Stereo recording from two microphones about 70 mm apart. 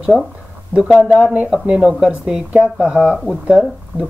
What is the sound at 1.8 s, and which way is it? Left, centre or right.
Speech, centre.